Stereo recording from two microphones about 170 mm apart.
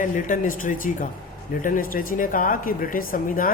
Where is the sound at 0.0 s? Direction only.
50° left (ahead or behind).